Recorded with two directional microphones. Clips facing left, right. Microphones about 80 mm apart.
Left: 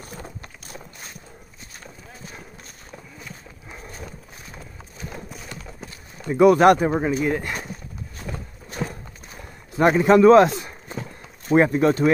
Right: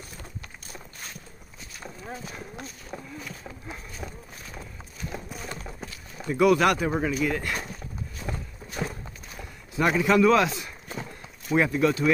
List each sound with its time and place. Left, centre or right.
6.2 s a man's voice: left
8.2 s clip-clop: centre
9.8 s a man's voice: left